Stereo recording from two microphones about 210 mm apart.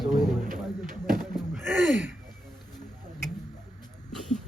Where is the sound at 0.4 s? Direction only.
40° right (ahead or behind).